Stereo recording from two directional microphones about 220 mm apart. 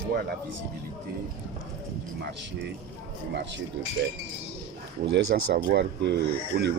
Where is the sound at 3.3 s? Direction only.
55° right (ahead or behind).